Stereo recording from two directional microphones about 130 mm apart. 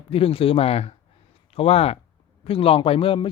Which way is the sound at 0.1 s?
45° left (ahead or behind).